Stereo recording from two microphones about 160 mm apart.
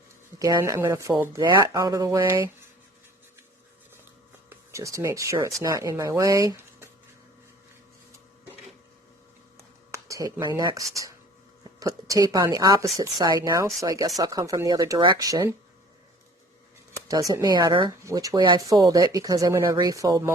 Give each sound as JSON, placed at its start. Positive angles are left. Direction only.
{"t": 0.3, "sound": "speech", "side_deg": -20}
{"t": 4.4, "sound": "speech", "side_deg": -20}
{"t": 9.9, "sound": "speech", "side_deg": -20}
{"t": 16.9, "sound": "speech", "side_deg": -20}